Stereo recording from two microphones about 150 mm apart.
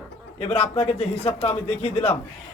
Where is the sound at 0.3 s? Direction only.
40° left (ahead or behind).